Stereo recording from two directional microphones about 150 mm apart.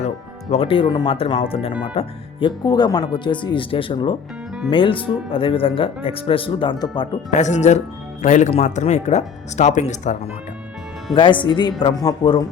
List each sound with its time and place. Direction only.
0.5 s speech: 35° left (ahead or behind)
7.3 s speech: 50° left (ahead or behind)
11.1 s speech: 35° left (ahead or behind)